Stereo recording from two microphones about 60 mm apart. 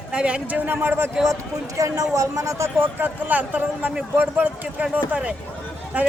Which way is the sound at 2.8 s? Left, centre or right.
Right.